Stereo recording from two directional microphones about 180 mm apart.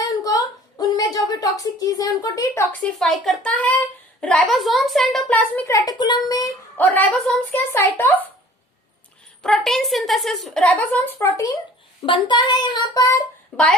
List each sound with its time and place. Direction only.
0.0 s a sound: 20° left (ahead or behind)
2.8 s a woman's voice: centre (ahead or behind)
9.4 s a woman's voice: centre (ahead or behind)
11.2 s speech: 15° left (ahead or behind)
12.0 s child singing: 25° left (ahead or behind)
13.5 s a woman's voice: 5° left (ahead or behind)